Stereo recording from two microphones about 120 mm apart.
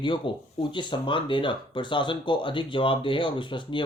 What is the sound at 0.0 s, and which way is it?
Speech, 45° left (ahead or behind).